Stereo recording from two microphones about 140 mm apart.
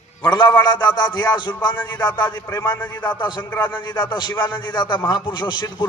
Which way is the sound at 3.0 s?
35° left (ahead or behind).